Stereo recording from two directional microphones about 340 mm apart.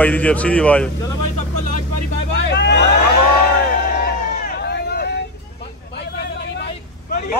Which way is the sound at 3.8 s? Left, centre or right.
Left.